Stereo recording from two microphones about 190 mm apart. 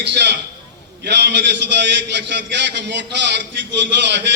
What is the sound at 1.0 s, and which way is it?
A man's voice, 65° right (ahead or behind).